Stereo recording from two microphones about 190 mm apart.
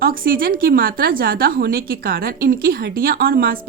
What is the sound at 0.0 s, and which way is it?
Speech, 50° right (ahead or behind).